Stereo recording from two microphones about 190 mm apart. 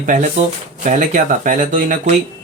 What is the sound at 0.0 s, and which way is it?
Speech, 40° right (ahead or behind).